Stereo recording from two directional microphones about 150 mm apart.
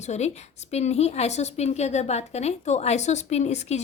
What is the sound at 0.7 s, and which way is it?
A woman's voice, 45° left (ahead or behind).